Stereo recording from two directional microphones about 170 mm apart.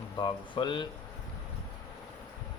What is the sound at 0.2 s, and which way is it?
Speech, 25° left (ahead or behind).